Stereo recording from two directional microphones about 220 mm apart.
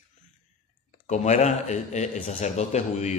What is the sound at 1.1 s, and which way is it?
Speech, 30° left (ahead or behind).